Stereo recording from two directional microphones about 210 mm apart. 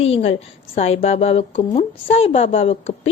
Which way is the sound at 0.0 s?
30° left (ahead or behind).